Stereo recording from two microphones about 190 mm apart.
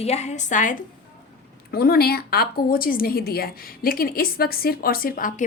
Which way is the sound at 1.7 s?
55° left (ahead or behind).